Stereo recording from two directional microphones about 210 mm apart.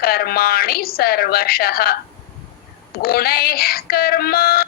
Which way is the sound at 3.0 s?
45° left (ahead or behind).